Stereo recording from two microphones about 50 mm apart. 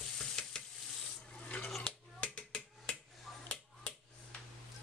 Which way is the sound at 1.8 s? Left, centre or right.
Left.